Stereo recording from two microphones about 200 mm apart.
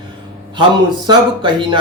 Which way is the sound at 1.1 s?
25° right (ahead or behind).